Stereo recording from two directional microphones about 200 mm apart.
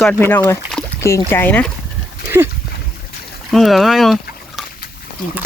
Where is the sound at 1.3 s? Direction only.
10° left (ahead or behind).